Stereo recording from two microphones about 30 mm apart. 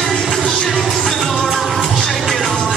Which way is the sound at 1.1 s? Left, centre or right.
Centre.